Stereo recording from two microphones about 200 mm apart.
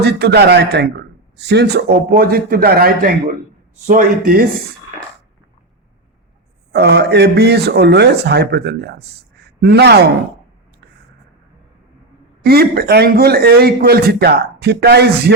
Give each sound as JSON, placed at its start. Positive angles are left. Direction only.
{"t": 0.0, "sound": "speech", "side_deg": -55}
{"t": 6.7, "sound": "speech", "side_deg": -55}
{"t": 12.4, "sound": "speech", "side_deg": -50}